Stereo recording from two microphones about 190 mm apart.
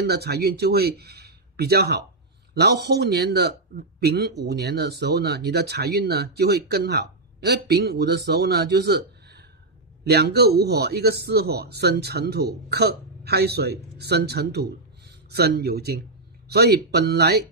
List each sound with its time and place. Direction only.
0.0 s a man's voice: 55° right (ahead or behind)